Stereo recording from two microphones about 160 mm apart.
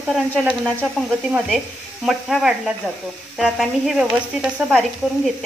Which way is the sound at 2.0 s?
5° right (ahead or behind).